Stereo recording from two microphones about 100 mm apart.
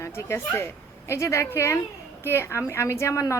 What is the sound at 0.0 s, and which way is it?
A woman's voice, 30° left (ahead or behind).